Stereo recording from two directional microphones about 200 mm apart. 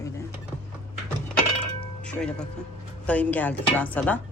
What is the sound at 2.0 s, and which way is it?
Speech, 5° left (ahead or behind).